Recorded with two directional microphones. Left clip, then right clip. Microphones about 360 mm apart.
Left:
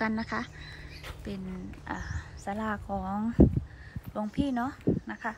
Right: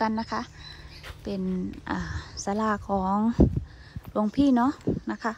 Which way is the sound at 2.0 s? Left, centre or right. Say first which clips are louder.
Right 6 dB; centre.